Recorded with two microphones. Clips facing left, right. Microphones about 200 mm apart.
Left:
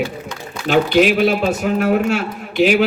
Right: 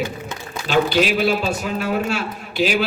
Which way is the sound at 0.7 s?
55° left (ahead or behind).